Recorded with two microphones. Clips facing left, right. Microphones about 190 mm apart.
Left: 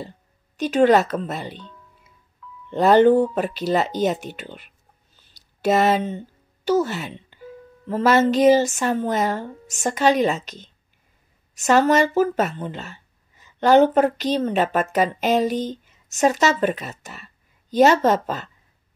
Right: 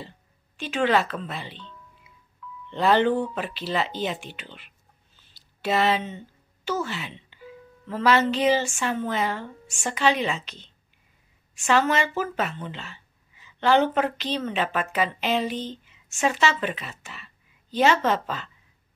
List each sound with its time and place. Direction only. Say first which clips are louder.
0.6 s speech: left 7 dB; 40° left (ahead or behind)